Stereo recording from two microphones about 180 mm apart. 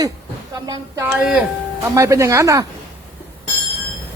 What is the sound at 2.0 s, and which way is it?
Speech, 15° right (ahead or behind).